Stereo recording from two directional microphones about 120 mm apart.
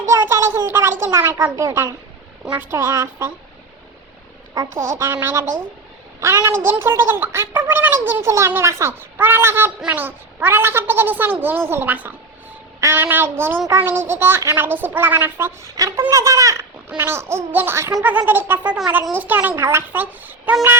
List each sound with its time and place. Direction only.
0.1 s a sound: 25° right (ahead or behind)
1.0 s speech: 20° right (ahead or behind)
4.5 s speech: 25° right (ahead or behind)